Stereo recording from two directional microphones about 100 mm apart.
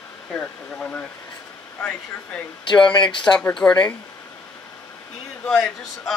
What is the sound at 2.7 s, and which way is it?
Speech, 50° left (ahead or behind).